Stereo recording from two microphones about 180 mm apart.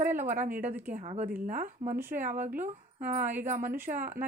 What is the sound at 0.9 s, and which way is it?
Speech, 40° right (ahead or behind).